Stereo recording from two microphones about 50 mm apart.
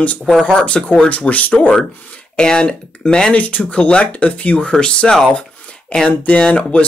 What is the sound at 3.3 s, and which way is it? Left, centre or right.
Speech, left.